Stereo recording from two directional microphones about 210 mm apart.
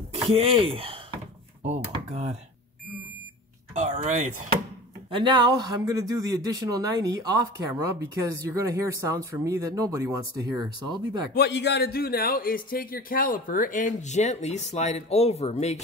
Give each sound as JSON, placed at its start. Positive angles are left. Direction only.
{"t": 0.1, "sound": "speech", "side_deg": -25}
{"t": 3.7, "sound": "speech", "side_deg": -30}
{"t": 5.1, "sound": "speech", "side_deg": -20}
{"t": 11.3, "sound": "a man's voice", "side_deg": 55}